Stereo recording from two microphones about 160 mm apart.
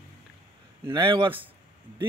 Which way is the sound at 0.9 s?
30° right (ahead or behind).